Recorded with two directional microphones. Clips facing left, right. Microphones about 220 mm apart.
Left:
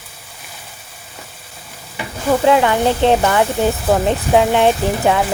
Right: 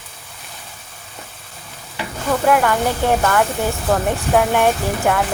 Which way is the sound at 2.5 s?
20° left (ahead or behind).